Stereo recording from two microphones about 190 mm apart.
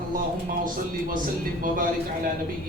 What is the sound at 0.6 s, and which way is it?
A man's voice, 45° right (ahead or behind).